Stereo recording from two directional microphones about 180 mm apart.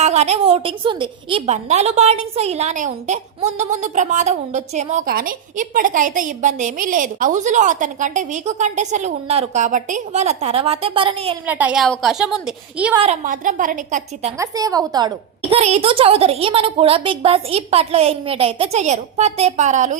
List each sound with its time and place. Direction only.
0.0 s a woman's voice: 40° right (ahead or behind)
1.5 s a woman's voice: 40° right (ahead or behind)
11.4 s a woman's voice: 10° right (ahead or behind)
13.0 s a woman's voice: 40° right (ahead or behind)
14.3 s a woman's voice: 20° right (ahead or behind); by 20.0 s 40° right (ahead or behind)